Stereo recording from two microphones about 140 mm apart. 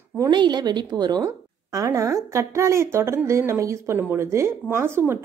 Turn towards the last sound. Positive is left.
turn(degrees=-15)  # may be behind; listen again after turning